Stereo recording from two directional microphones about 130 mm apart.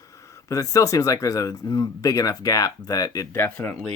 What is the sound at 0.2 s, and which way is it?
Speech, 25° left (ahead or behind).